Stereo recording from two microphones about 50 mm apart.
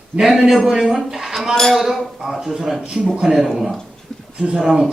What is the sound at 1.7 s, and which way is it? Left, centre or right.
A man's voice, centre.